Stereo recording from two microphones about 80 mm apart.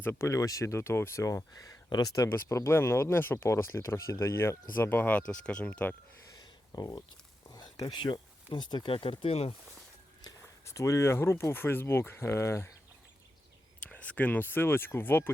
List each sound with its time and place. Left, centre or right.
0.0 s speech: left
0.3 s speech: left
2.3 s speech: left; by 5.9 s centre
6.3 s a sound: left
8.5 s speech: left
10.7 s speech: left
13.8 s speech: centre